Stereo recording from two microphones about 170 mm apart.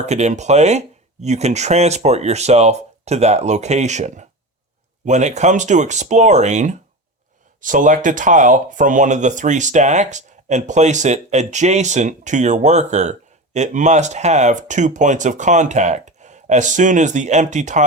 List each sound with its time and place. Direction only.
0.0 s speech: 40° right (ahead or behind)